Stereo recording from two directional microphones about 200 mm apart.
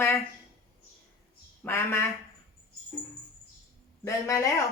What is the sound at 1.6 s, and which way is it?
Speech, 10° left (ahead or behind).